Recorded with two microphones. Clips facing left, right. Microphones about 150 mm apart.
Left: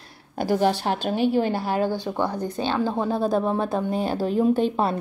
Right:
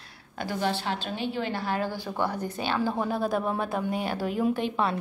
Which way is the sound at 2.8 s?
20° left (ahead or behind).